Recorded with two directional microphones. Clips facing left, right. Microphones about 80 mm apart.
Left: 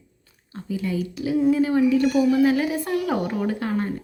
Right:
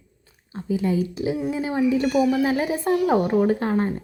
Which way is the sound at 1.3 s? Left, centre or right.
Centre.